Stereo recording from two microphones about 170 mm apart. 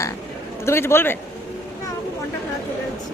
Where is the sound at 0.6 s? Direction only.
15° left (ahead or behind).